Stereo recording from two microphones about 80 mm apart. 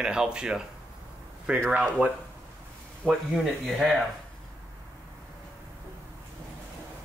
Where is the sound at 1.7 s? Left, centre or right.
Centre.